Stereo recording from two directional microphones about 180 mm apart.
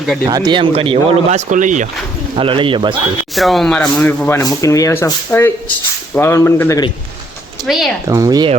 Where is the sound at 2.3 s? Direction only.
30° right (ahead or behind).